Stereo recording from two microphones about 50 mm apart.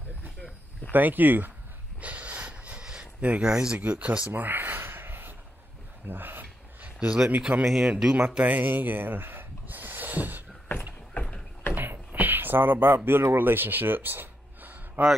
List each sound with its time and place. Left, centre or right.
0.9 s speech: right
2.0 s a sound: right
3.8 s speech: right
4.3 s a sound: right
7.0 s speech: right
7.2 s speech: right
7.6 s speech: centre
8.4 s speech: right
11.7 s a sound: right